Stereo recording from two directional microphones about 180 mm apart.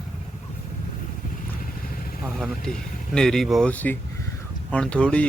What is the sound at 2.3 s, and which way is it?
Speech, centre (ahead or behind).